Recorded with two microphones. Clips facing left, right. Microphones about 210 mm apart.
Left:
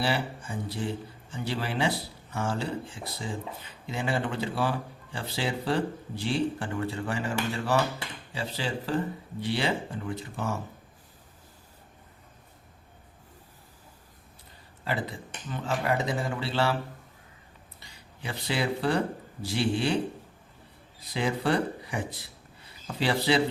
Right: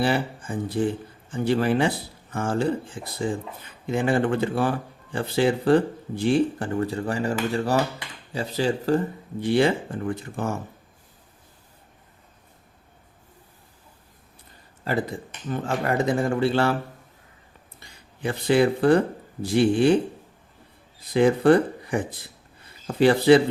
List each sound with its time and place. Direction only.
0.0 s speech: 50° right (ahead or behind)
14.8 s speech: 45° right (ahead or behind)
17.7 s speech: 50° right (ahead or behind)
21.1 s speech: 50° right (ahead or behind)